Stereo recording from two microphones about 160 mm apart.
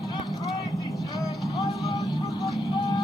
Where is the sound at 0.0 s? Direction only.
25° left (ahead or behind).